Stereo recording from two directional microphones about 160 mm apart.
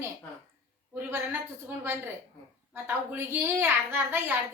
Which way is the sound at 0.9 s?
15° right (ahead or behind).